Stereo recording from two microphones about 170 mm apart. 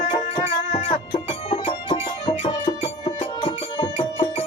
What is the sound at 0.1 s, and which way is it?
Music, 30° left (ahead or behind).